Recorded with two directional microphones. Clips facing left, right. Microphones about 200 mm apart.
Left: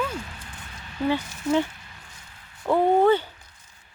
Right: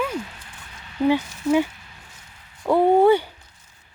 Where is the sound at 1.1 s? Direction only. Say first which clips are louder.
Right 4 dB; 10° right (ahead or behind).